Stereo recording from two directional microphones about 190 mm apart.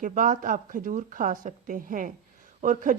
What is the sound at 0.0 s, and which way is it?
A woman's voice, 45° right (ahead or behind).